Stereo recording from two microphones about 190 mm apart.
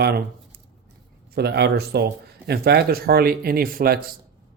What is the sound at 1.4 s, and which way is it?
A man's voice, 60° right (ahead or behind).